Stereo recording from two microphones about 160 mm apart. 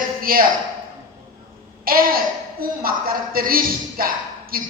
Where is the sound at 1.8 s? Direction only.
65° right (ahead or behind).